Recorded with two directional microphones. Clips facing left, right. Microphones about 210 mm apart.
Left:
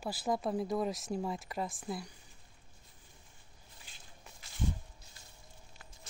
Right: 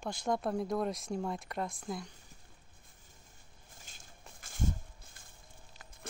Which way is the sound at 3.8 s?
45° right (ahead or behind).